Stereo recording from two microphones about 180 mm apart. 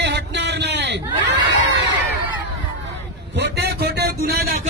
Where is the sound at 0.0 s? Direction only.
70° right (ahead or behind).